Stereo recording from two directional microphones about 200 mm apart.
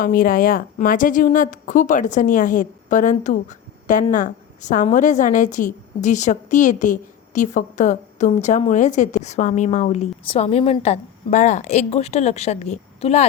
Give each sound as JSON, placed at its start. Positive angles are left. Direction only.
{"t": 0.0, "sound": "a woman's voice", "side_deg": 45}